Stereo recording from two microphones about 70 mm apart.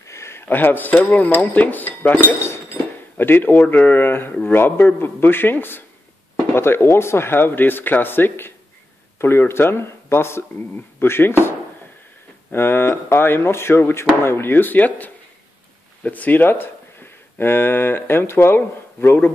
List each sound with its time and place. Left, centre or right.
0.0 s speech: left
2.4 s speech: left
12.4 s speech: left